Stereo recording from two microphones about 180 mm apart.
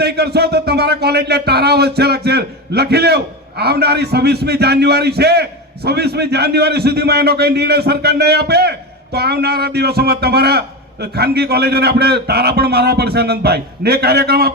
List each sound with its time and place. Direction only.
0.0 s a man's voice: 65° right (ahead or behind)